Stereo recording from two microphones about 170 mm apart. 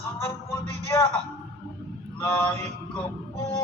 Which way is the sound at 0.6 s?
40° right (ahead or behind).